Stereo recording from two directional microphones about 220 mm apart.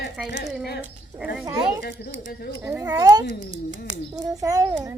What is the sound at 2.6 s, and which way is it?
Speech, 15° right (ahead or behind).